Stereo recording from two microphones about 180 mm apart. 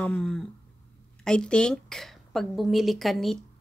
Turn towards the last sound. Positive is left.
turn(degrees=0)  # may be behind; listen again after turning